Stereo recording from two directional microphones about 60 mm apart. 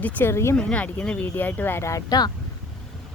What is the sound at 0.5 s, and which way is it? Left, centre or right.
Speech, centre.